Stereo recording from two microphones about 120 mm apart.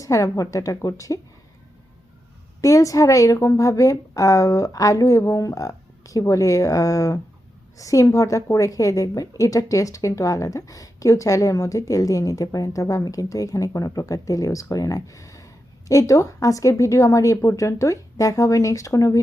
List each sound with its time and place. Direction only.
0.0 s a woman's voice: 25° left (ahead or behind)
2.6 s a woman's voice: 30° left (ahead or behind)